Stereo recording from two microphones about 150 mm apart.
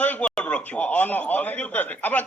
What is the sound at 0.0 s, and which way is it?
A man's voice, 10° left (ahead or behind).